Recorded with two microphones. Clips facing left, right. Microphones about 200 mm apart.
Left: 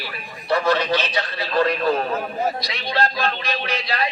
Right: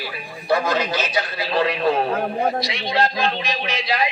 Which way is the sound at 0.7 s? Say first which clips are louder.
Left 1 dB; 10° right (ahead or behind).